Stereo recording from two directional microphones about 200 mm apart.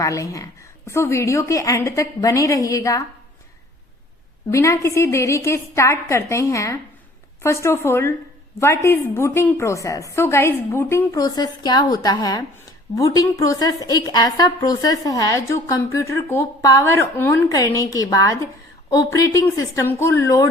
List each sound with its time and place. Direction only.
0.0 s a woman's voice: 15° left (ahead or behind)
4.5 s a woman's voice: 15° left (ahead or behind)